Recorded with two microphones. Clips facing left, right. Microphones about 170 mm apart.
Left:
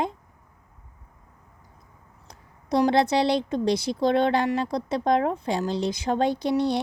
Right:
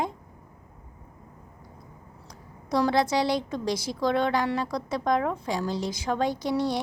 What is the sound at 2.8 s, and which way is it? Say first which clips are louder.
Speech: left 3 dB; 20° left (ahead or behind).